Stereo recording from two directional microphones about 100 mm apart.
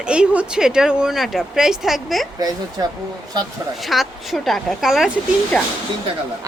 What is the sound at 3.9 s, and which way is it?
A woman's voice, centre (ahead or behind).